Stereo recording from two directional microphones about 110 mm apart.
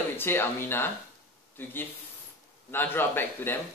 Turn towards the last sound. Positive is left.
turn(degrees=20)  # may be behind; listen again after turning